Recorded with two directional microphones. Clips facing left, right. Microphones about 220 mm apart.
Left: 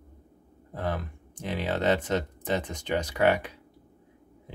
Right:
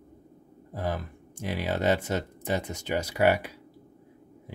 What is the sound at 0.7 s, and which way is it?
Speech, 10° right (ahead or behind).